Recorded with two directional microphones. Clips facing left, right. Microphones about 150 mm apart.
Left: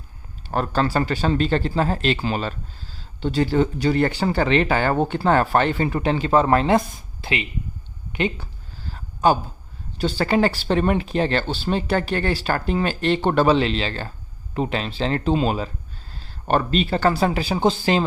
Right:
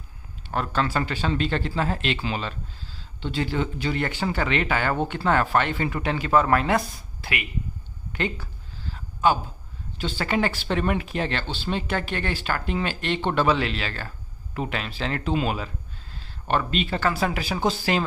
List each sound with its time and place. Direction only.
0.4 s speech: 35° left (ahead or behind); by 8.4 s 20° left (ahead or behind)
8.8 s a sound: 40° left (ahead or behind)
10.0 s speech: 40° left (ahead or behind)